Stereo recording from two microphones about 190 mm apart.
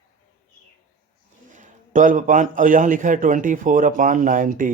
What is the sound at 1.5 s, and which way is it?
Speech, 40° right (ahead or behind).